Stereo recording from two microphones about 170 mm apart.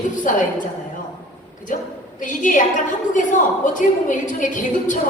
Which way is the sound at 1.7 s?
50° left (ahead or behind).